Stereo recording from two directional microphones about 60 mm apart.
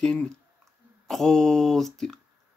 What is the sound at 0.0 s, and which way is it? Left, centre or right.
Speech, centre.